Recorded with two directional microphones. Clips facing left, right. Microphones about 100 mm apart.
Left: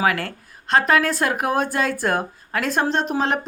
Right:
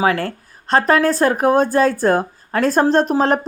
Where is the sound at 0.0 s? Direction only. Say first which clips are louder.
Right 4 dB; 30° right (ahead or behind).